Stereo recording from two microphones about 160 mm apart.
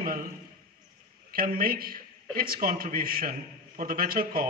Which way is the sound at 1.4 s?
65° right (ahead or behind).